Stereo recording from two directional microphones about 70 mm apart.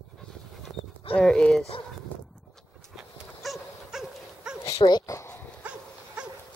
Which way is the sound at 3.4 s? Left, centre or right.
Centre.